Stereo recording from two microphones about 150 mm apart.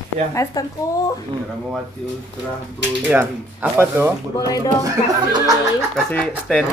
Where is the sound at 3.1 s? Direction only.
15° right (ahead or behind).